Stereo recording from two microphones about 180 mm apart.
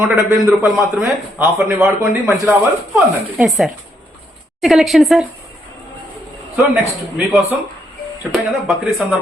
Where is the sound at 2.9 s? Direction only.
Centre (ahead or behind).